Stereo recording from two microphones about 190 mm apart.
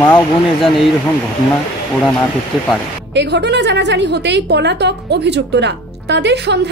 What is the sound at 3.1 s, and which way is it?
A woman's voice, 65° right (ahead or behind).